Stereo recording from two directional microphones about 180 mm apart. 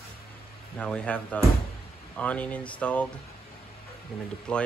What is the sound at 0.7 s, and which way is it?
Speech, 5° left (ahead or behind).